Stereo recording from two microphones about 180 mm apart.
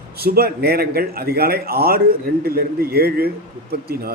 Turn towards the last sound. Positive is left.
turn(degrees=-60)  # may be behind; listen again after turning